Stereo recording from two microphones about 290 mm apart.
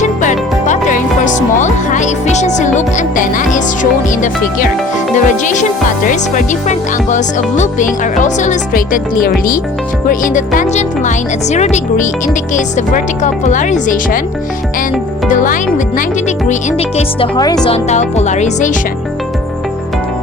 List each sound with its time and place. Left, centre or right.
0.0 s speech: left
5.1 s speech: left
16.5 s speech: left